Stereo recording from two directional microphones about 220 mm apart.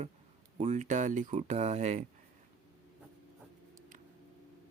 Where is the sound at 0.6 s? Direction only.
30° right (ahead or behind).